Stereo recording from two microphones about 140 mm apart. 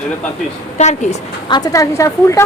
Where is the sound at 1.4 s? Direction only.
30° left (ahead or behind).